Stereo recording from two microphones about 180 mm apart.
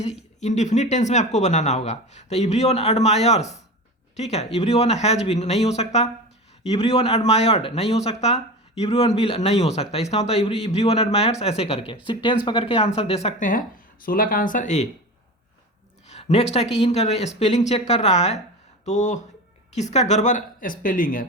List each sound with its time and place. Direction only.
0.3 s speech: 40° left (ahead or behind)
16.0 s a sound: 35° left (ahead or behind)
16.7 s speech: 35° left (ahead or behind)